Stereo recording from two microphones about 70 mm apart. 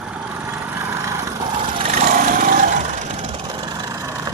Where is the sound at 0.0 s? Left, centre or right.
Centre.